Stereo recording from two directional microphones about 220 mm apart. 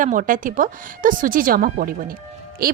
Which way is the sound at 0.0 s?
35° right (ahead or behind).